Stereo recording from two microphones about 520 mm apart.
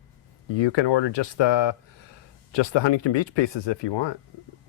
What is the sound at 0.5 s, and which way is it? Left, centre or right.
Speech, left.